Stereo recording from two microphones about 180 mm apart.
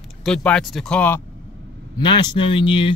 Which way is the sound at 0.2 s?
5° left (ahead or behind).